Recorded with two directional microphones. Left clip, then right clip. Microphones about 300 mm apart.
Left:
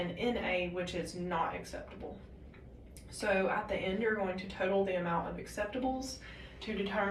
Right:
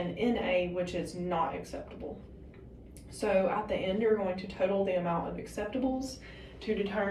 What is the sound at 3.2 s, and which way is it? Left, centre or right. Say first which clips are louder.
A woman's voice: right 3 dB; left.